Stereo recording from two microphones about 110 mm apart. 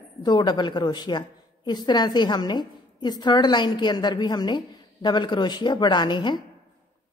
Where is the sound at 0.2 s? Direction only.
40° left (ahead or behind).